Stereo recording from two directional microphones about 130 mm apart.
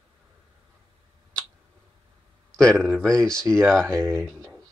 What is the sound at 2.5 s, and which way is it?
Speech, 5° left (ahead or behind).